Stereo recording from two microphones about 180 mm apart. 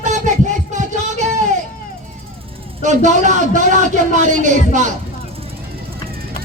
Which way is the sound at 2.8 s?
40° right (ahead or behind).